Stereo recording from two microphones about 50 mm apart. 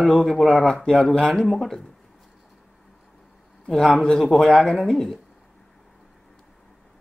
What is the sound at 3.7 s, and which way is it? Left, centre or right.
Speech, centre.